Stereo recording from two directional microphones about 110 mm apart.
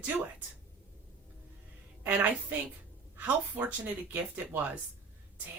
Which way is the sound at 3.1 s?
15° right (ahead or behind).